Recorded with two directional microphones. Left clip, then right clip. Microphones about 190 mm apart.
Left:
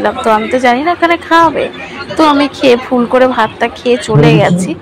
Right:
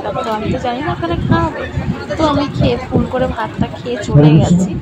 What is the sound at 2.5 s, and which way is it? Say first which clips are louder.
Speech: left 8 dB; 10° left (ahead or behind).